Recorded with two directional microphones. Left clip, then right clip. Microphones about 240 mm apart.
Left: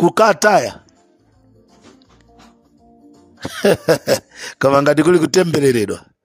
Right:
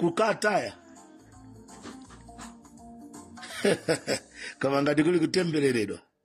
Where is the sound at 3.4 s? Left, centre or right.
Left.